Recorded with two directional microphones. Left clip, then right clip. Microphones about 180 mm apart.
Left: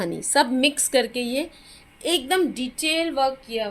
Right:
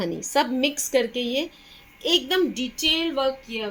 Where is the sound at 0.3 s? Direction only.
20° left (ahead or behind).